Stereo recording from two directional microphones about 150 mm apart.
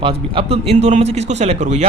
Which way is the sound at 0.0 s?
40° right (ahead or behind).